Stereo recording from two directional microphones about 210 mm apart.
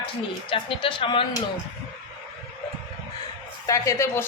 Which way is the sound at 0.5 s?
25° left (ahead or behind).